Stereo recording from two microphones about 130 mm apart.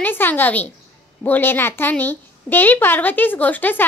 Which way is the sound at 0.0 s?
15° left (ahead or behind).